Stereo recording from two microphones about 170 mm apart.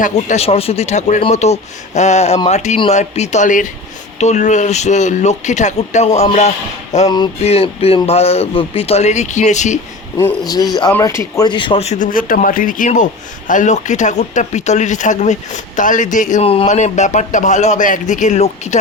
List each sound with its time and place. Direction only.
0.0 s speech: 45° left (ahead or behind)
10.4 s a man's voice: 25° left (ahead or behind); by 18.8 s 40° left (ahead or behind)